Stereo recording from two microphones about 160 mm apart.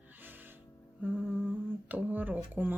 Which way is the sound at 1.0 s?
10° right (ahead or behind).